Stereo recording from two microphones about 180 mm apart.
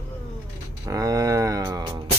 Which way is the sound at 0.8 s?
20° right (ahead or behind).